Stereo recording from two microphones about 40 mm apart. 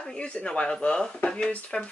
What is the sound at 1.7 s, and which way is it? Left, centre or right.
Speech, left.